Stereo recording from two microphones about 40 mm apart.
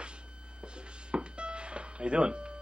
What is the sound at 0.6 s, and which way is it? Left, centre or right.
Music, right.